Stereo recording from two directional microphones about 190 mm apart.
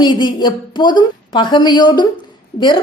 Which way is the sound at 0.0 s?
25° left (ahead or behind).